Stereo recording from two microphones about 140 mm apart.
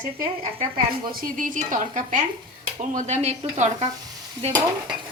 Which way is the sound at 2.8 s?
60° right (ahead or behind).